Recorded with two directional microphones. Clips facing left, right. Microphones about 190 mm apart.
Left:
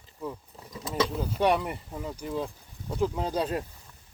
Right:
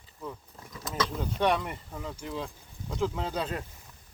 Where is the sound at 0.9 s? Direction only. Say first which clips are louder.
Left 3 dB; 5° left (ahead or behind).